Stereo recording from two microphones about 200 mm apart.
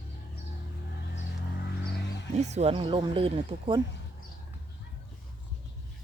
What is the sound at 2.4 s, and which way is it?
Speech, 35° right (ahead or behind).